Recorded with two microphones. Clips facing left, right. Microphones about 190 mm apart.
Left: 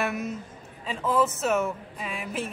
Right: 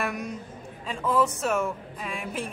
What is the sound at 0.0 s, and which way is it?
A man's voice, 5° left (ahead or behind).